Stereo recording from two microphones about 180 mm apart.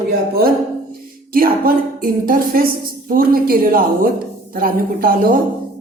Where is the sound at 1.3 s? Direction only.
50° right (ahead or behind).